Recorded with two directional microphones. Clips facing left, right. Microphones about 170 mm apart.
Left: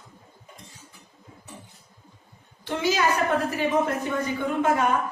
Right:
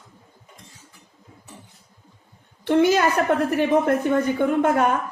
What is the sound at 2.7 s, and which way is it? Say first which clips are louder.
Speech: right 6 dB; 55° right (ahead or behind).